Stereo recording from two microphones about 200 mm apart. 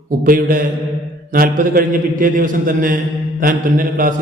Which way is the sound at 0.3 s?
45° right (ahead or behind).